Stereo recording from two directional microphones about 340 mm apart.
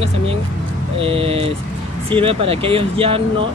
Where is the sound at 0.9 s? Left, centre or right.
Centre.